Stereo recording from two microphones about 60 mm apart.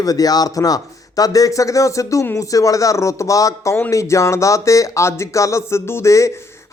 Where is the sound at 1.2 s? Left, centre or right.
Left.